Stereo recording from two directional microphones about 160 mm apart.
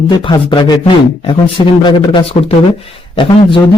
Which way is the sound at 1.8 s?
30° left (ahead or behind).